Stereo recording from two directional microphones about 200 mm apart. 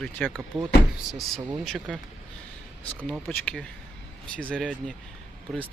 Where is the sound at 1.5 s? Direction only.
Centre (ahead or behind).